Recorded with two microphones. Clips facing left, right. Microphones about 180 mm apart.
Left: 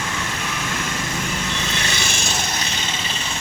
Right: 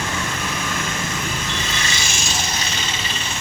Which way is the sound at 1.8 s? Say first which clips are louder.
Left 1 dB; 60° left (ahead or behind).